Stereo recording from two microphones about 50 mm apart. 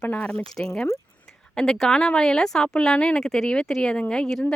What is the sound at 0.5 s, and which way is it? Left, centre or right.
Speech, centre.